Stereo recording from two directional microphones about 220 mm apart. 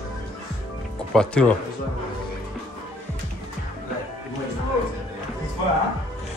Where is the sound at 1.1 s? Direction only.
5° left (ahead or behind).